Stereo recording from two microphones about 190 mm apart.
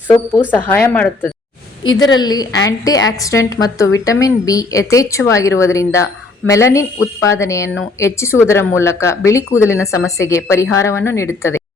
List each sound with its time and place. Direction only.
0.1 s speech: 10° left (ahead or behind)
2.1 s a woman's voice: 20° left (ahead or behind)